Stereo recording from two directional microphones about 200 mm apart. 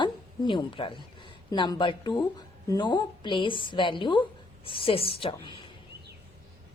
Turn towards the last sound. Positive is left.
turn(degrees=25)  # may be behind; listen again after turning